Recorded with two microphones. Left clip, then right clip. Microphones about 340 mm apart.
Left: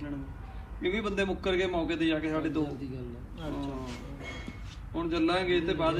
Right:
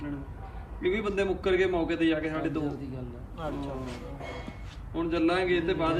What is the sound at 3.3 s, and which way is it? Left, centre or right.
Speech, centre.